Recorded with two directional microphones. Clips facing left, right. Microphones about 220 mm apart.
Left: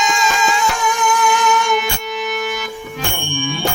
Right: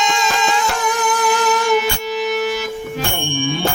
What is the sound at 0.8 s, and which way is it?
Music, 35° right (ahead or behind).